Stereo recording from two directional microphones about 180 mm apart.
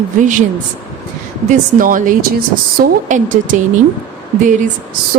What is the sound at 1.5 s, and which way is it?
Speech, 50° right (ahead or behind).